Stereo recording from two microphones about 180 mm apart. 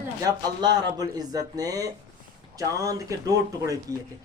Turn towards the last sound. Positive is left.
turn(degrees=-20)  # may be behind; listen again after turning